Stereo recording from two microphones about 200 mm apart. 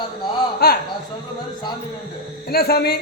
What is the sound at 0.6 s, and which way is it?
Speech, 50° left (ahead or behind).